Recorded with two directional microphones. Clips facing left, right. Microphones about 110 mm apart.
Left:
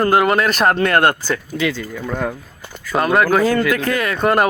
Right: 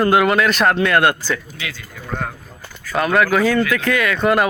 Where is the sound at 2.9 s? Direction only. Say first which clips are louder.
Left 1 dB; 35° left (ahead or behind).